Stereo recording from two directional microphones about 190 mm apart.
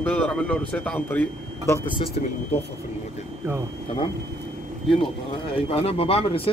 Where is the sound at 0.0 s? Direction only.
5° left (ahead or behind).